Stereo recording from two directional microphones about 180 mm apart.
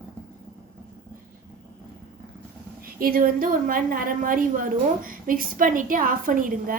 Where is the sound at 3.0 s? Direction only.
55° right (ahead or behind).